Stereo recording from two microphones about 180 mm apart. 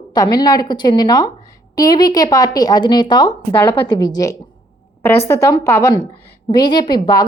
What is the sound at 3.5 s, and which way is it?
Speech, 10° left (ahead or behind).